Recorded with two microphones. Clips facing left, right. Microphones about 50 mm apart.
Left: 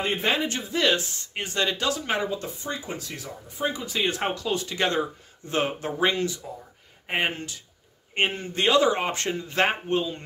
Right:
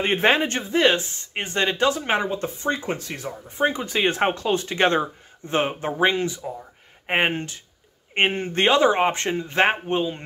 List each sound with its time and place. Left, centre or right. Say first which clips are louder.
0.0 s speech: right 5 dB; right